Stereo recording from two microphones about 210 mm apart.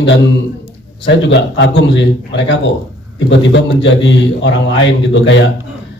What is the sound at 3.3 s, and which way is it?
Speech, 60° left (ahead or behind).